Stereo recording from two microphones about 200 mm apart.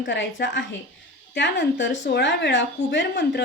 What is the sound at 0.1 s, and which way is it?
Speech, 65° left (ahead or behind).